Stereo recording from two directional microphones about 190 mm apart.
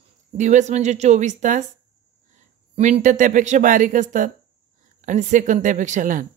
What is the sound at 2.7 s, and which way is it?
Speech, 35° right (ahead or behind).